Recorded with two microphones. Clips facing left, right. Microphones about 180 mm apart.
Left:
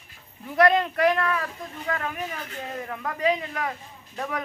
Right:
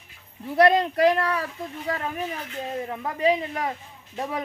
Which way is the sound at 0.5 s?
30° right (ahead or behind).